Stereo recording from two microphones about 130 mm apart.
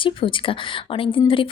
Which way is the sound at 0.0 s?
40° left (ahead or behind).